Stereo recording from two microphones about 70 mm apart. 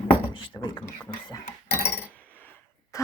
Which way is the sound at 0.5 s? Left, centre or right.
Left.